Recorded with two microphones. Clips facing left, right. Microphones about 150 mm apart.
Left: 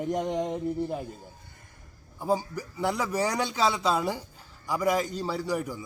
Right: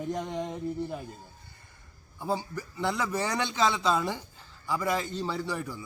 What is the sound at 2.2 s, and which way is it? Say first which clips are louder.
A man's voice: left 4 dB; 10° left (ahead or behind).